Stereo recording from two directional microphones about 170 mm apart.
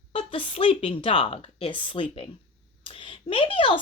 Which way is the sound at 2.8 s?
30° left (ahead or behind).